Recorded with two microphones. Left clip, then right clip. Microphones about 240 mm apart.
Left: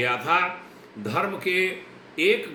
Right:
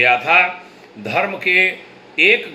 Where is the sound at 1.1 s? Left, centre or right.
Centre.